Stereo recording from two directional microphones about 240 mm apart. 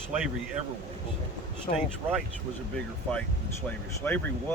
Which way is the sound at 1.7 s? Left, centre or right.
Left.